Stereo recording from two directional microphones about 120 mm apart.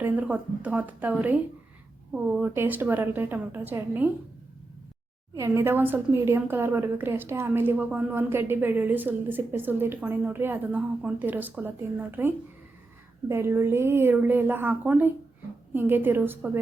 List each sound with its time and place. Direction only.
0.0 s a woman's voice: 15° right (ahead or behind)
5.3 s a woman's voice: 25° right (ahead or behind)